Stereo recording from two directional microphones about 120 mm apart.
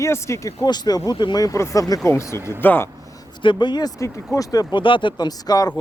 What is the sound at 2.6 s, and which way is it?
Speech, 15° left (ahead or behind).